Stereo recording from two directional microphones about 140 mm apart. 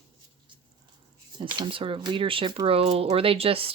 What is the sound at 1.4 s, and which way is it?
Speech, 35° right (ahead or behind).